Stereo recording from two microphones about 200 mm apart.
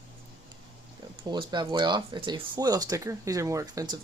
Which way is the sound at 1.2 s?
20° right (ahead or behind).